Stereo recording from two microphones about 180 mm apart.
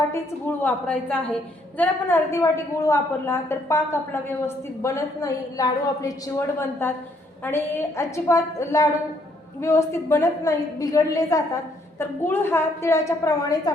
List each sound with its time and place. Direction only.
0.1 s a woman's voice: 10° left (ahead or behind)